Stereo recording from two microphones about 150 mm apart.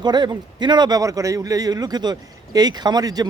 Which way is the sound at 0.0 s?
30° right (ahead or behind).